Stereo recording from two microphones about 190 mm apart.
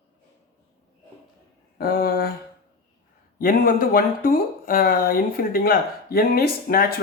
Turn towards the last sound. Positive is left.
turn(degrees=50)  # may be behind; listen again after turning